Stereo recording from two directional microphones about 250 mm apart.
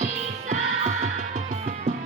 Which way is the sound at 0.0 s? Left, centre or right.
Right.